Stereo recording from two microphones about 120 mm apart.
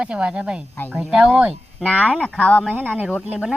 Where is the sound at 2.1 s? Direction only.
10° left (ahead or behind).